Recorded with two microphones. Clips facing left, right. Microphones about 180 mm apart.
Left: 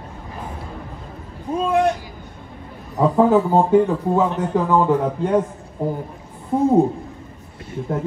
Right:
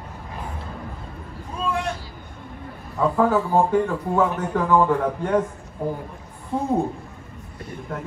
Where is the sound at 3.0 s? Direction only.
20° left (ahead or behind).